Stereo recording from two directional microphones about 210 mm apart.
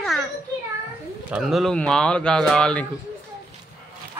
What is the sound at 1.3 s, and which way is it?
Speech, centre (ahead or behind).